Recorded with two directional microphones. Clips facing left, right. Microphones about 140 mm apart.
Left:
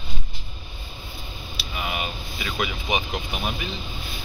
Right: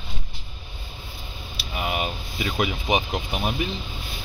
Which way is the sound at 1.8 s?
35° right (ahead or behind).